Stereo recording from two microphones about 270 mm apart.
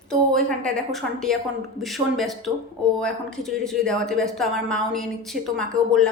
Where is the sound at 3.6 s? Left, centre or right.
Centre.